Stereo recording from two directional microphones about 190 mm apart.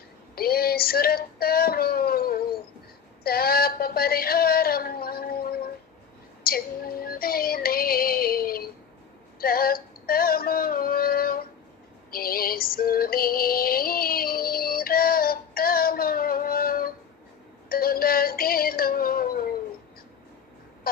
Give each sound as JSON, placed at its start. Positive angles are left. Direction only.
{"t": 0.3, "sound": "female singing", "side_deg": 55}
{"t": 3.2, "sound": "a sound", "side_deg": 55}
{"t": 6.4, "sound": "synthetic singing", "side_deg": 50}
{"t": 9.4, "sound": "music", "side_deg": 50}
{"t": 12.1, "sound": "synthetic singing", "side_deg": 50}
{"t": 20.9, "sound": "a sound", "side_deg": 50}